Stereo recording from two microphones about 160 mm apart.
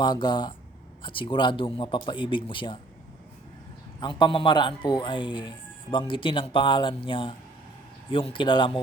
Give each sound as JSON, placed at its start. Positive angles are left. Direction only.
{"t": 0.0, "sound": "speech", "side_deg": 30}
{"t": 4.2, "sound": "speech", "side_deg": 30}